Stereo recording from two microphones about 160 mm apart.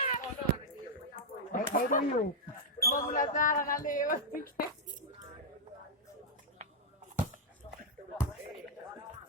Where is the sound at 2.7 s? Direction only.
20° left (ahead or behind).